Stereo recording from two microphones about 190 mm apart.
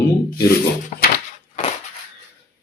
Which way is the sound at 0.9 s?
40° left (ahead or behind).